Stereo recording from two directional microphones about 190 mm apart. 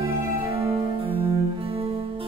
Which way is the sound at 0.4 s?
30° right (ahead or behind).